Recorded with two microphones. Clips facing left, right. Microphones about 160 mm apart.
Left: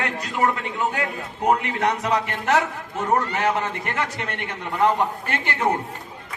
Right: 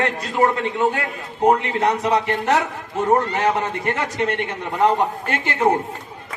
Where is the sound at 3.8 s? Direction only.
25° right (ahead or behind).